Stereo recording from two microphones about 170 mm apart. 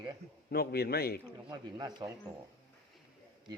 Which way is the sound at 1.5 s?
25° right (ahead or behind).